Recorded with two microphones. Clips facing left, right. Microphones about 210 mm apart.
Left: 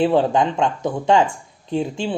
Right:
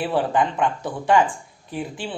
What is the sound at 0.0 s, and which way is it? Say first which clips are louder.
Speech: left 5 dB; 25° left (ahead or behind).